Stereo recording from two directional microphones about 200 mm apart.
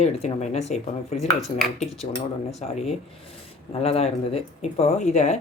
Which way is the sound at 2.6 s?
30° left (ahead or behind).